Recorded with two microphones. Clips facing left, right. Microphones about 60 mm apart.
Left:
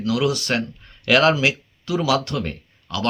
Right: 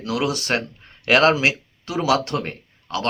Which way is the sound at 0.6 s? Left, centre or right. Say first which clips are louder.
Left 4 dB; right.